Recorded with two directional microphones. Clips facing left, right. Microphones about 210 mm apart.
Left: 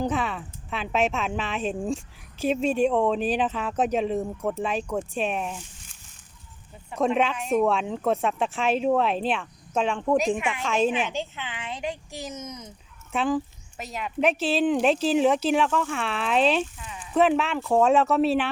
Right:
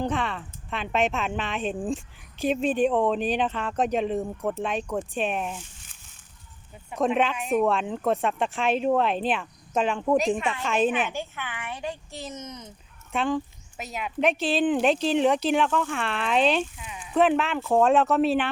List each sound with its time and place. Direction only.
0.0 s speech: 5° left (ahead or behind)
10.6 s speech: 5° right (ahead or behind)
11.1 s speech: 20° left (ahead or behind); by 18.4 s centre (ahead or behind)